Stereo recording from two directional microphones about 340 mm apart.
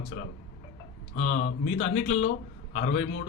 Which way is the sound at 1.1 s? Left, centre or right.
Left.